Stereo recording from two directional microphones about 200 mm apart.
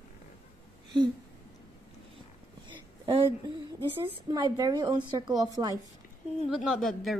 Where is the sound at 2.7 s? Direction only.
30° right (ahead or behind).